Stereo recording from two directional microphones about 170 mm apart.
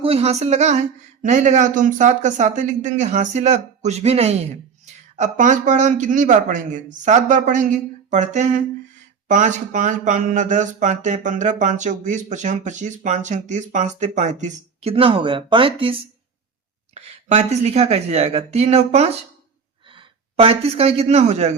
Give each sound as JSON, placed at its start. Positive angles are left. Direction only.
{"t": 0.0, "sound": "a man's voice", "side_deg": -35}